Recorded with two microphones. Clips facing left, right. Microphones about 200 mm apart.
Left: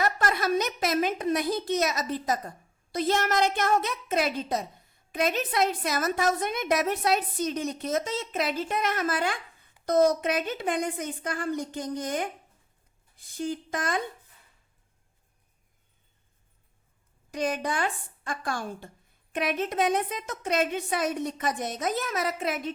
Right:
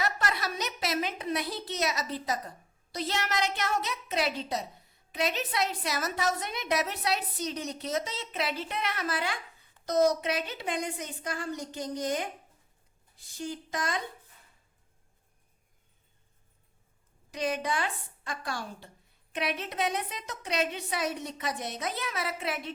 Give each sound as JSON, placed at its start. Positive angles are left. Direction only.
{"t": 0.0, "sound": "a woman's voice", "side_deg": 50}
{"t": 17.3, "sound": "a woman's voice", "side_deg": 50}